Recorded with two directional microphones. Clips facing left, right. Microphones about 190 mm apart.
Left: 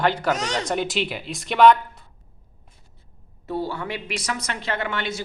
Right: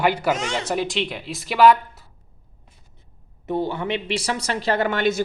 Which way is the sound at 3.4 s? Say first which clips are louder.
Right 4 dB; 20° right (ahead or behind).